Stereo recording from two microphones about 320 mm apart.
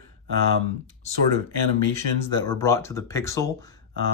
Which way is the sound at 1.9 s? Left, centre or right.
Centre.